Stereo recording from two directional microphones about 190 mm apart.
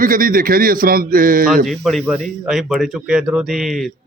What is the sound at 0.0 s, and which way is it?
A man's voice, 50° right (ahead or behind).